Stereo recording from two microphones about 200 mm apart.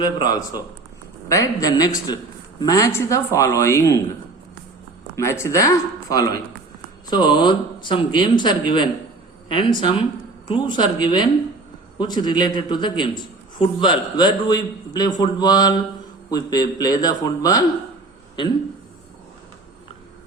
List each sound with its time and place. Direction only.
0.0 s speech: 20° left (ahead or behind)
5.1 s speech: 15° left (ahead or behind)